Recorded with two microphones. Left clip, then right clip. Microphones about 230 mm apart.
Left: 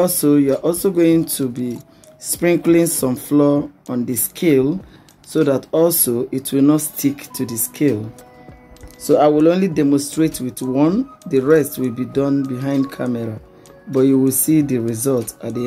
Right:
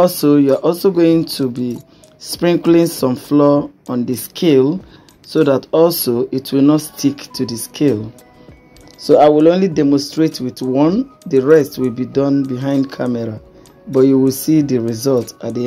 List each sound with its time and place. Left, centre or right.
0.0 s speech: centre
9.0 s speech: centre